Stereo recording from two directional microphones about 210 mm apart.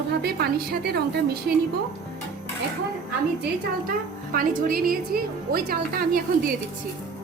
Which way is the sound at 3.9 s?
40° right (ahead or behind).